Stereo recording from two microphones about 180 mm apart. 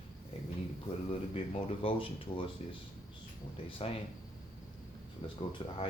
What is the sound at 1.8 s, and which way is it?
Speech, 30° left (ahead or behind).